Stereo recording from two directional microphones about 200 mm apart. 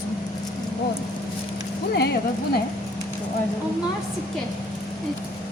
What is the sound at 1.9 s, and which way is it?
Speech, 55° left (ahead or behind).